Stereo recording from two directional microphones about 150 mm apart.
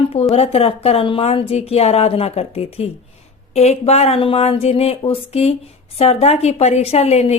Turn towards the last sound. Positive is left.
turn(degrees=45)  # may be behind; listen again after turning